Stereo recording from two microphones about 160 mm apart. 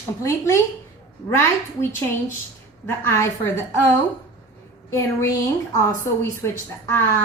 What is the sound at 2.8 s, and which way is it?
A woman's voice, 15° left (ahead or behind).